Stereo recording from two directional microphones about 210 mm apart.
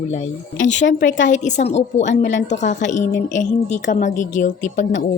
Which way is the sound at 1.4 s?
35° left (ahead or behind).